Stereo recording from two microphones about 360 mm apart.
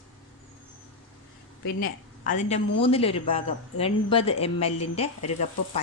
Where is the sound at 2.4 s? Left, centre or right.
Centre.